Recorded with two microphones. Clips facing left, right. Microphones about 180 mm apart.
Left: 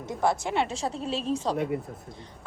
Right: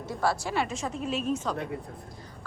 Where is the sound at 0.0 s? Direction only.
20° left (ahead or behind).